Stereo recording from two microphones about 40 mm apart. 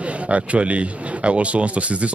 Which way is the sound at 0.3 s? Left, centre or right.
Right.